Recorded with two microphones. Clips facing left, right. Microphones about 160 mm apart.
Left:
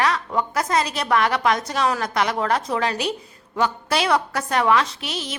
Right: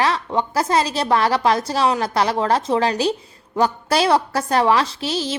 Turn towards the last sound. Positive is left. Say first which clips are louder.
# right 5 dB
turn(degrees=-30)  # may be behind; listen again after turning